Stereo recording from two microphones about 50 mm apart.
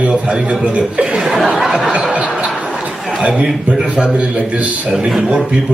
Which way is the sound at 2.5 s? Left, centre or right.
Centre.